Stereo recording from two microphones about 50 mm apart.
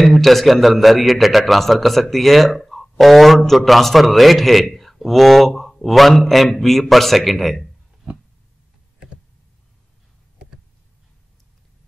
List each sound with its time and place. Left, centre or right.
0.0 s a man's voice: centre
4.6 s a sound: centre
5.0 s a man's voice: centre